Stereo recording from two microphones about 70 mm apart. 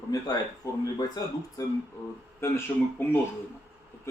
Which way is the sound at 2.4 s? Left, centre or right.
Left.